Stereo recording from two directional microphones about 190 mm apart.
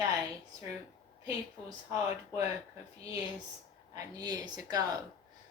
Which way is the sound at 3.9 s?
20° right (ahead or behind).